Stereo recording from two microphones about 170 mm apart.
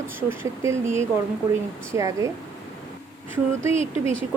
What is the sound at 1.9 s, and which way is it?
Speech, 20° right (ahead or behind).